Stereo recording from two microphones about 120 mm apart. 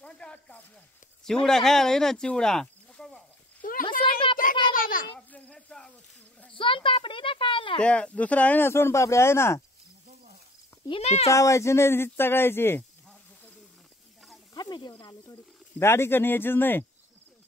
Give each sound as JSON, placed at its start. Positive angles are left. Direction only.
{"t": 0.0, "sound": "speech", "side_deg": 10}
{"t": 3.8, "sound": "a sound", "side_deg": 45}
{"t": 5.1, "sound": "a sound", "side_deg": 10}
{"t": 6.5, "sound": "a woman's voice", "side_deg": 45}
{"t": 7.8, "sound": "speech", "side_deg": 10}
{"t": 10.9, "sound": "speech", "side_deg": 60}
{"t": 11.2, "sound": "speech", "side_deg": 25}
{"t": 14.5, "sound": "speech", "side_deg": 35}
{"t": 15.8, "sound": "speech", "side_deg": 20}